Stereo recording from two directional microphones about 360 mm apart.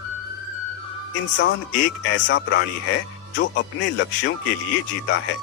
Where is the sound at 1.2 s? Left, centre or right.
Left.